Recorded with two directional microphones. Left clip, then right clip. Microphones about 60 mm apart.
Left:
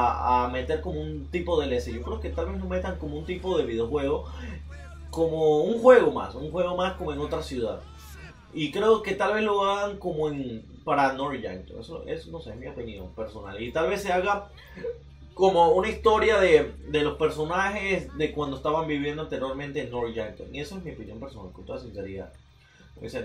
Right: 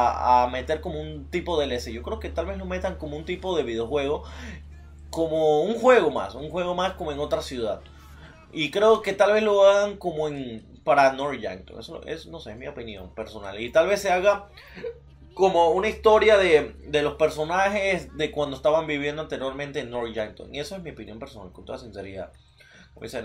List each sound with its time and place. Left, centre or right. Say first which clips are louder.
0.0 s speech: right 4 dB; right
5.1 s speech: right 1 dB; right
8.5 s speech: right 3 dB; right
13.6 s speech: right 6 dB; right
15.3 s speech: even; centre